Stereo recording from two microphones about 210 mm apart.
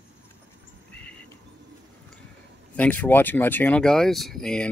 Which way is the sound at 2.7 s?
5° left (ahead or behind).